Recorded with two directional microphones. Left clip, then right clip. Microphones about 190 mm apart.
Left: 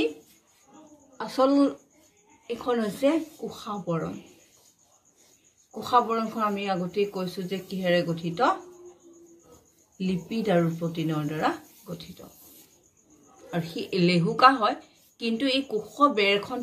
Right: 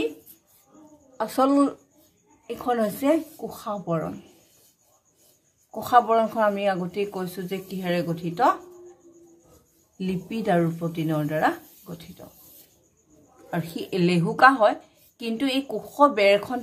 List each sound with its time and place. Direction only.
1.1 s a woman's voice: 45° right (ahead or behind)
5.8 s a woman's voice: 45° right (ahead or behind)
9.9 s a woman's voice: 45° right (ahead or behind)
13.5 s a woman's voice: 40° right (ahead or behind)